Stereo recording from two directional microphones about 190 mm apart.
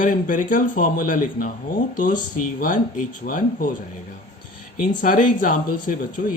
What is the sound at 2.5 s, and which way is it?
Speech, 45° left (ahead or behind).